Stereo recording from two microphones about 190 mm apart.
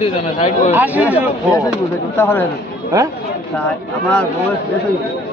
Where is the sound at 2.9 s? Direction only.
20° right (ahead or behind).